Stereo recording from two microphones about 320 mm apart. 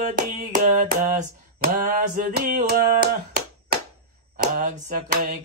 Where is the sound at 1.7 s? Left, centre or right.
Right.